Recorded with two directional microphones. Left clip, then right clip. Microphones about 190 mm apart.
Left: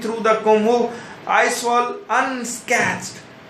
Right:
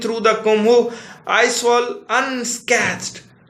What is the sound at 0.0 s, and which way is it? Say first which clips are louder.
A man's voice: right 1 dB; 30° right (ahead or behind).